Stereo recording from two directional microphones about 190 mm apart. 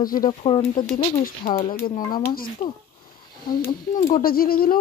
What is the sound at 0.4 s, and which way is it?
Speech, 30° left (ahead or behind).